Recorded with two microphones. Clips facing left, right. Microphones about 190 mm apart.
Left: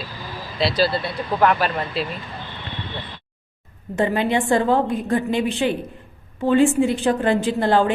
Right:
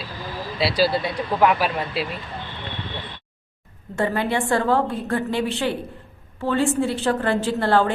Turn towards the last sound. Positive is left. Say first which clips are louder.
# left 1 dB
turn(degrees=15)  # may be behind; listen again after turning